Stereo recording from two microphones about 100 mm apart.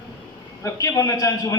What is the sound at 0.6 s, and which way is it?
Speech, 35° left (ahead or behind).